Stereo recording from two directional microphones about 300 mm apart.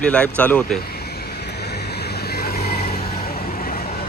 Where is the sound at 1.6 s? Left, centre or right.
Left.